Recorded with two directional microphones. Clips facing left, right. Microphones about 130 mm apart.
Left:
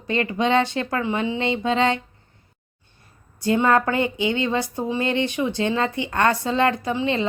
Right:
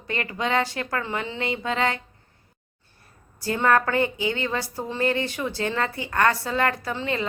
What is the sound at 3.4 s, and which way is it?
Speech, 20° left (ahead or behind).